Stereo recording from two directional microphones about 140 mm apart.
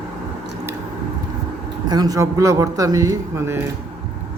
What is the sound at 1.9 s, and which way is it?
Speech, 25° right (ahead or behind).